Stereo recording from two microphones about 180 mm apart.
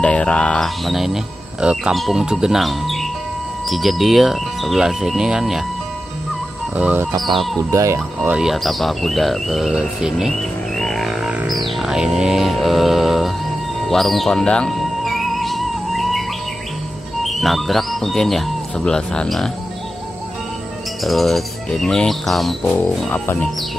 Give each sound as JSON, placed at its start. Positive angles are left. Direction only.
{"t": 0.0, "sound": "speech", "side_deg": 5}
{"t": 6.7, "sound": "music", "side_deg": -10}
{"t": 8.2, "sound": "speech", "side_deg": -5}
{"t": 10.8, "sound": "music", "side_deg": 0}
{"t": 17.2, "sound": "speech", "side_deg": 0}
{"t": 21.0, "sound": "speech", "side_deg": 0}